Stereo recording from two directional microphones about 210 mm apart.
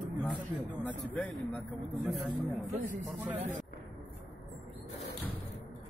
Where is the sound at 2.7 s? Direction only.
35° right (ahead or behind).